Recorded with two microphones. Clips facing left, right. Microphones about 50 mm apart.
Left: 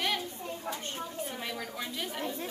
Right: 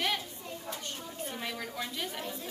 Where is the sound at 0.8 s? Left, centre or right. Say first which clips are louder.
Left 4 dB; left.